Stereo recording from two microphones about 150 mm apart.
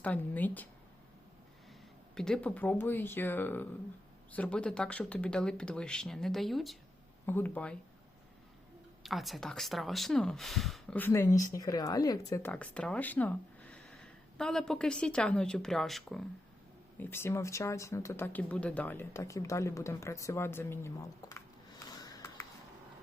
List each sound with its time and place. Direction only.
0.0 s speech: 10° left (ahead or behind)
2.1 s speech: 5° left (ahead or behind)
7.3 s speech: 15° left (ahead or behind)
9.0 s speech: centre (ahead or behind)
10.9 s speech: 15° left (ahead or behind)
12.5 s speech: 5° left (ahead or behind)
17.0 s speech: 15° left (ahead or behind)
22.0 s a sound: 25° left (ahead or behind)